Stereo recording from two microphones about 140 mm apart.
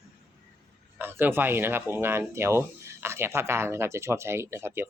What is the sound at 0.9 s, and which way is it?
Speech, 15° right (ahead or behind).